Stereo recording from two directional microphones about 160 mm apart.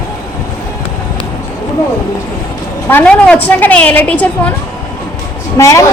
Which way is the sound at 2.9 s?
10° left (ahead or behind).